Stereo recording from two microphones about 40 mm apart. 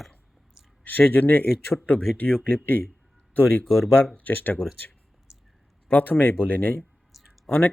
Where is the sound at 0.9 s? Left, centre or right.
Left.